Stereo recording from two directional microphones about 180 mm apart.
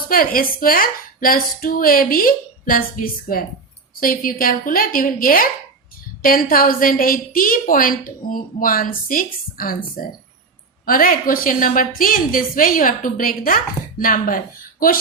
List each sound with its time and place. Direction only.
0.1 s speech: 55° left (ahead or behind)